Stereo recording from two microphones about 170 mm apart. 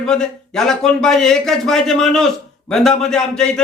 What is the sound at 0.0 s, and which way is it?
A man's voice, 5° left (ahead or behind).